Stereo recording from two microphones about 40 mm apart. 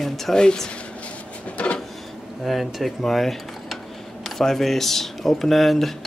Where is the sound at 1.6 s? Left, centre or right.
Left.